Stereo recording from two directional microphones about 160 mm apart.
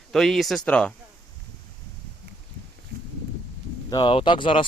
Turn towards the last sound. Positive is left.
turn(degrees=30)  # may be behind; listen again after turning